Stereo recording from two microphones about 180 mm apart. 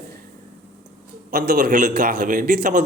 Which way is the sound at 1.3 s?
60° right (ahead or behind).